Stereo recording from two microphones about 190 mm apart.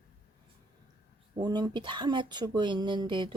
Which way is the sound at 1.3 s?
20° right (ahead or behind).